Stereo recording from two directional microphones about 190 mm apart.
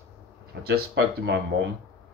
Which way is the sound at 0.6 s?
60° right (ahead or behind).